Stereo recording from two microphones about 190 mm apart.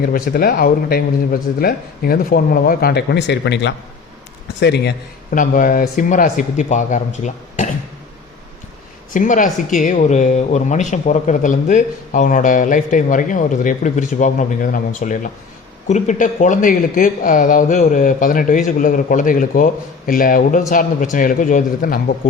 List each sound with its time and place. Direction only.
0.0 s a man's voice: 50° left (ahead or behind)
5.3 s speech: 45° left (ahead or behind)
9.1 s speech: 40° left (ahead or behind)